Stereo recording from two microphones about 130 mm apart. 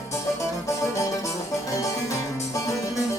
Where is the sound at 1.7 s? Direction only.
25° left (ahead or behind).